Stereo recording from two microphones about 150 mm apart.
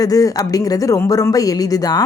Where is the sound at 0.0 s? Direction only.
25° left (ahead or behind).